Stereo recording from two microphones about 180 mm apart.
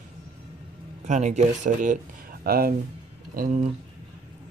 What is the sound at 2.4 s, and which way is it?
Speech, 55° right (ahead or behind).